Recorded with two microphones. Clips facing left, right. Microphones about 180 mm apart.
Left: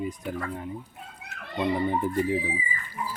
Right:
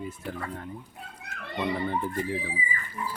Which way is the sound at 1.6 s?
15° left (ahead or behind).